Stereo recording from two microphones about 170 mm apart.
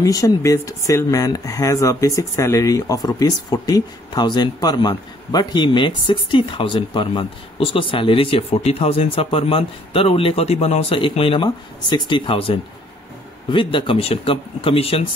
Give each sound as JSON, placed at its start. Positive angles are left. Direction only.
{"t": 0.0, "sound": "speech", "side_deg": 20}